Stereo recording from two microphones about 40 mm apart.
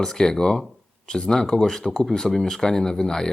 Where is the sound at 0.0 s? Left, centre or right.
Centre.